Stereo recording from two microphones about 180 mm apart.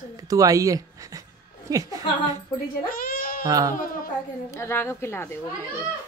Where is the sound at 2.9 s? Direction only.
55° left (ahead or behind).